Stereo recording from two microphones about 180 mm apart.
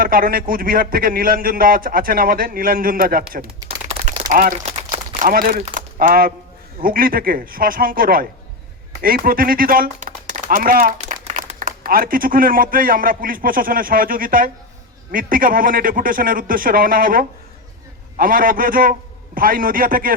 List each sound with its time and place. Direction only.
0.0 s a man's voice: 55° right (ahead or behind)
3.8 s a sound: 35° right (ahead or behind)
4.6 s crumpling: 35° right (ahead or behind)
5.3 s a man's voice: 50° right (ahead or behind)